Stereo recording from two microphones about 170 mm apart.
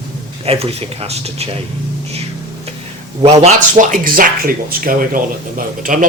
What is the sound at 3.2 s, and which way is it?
Speech, 35° right (ahead or behind).